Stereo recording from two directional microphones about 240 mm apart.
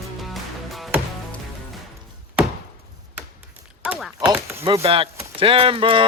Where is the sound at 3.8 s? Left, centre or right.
Centre.